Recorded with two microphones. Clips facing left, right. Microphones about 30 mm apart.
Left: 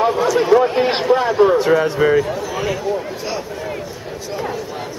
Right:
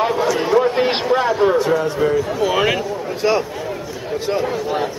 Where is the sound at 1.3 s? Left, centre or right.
Centre.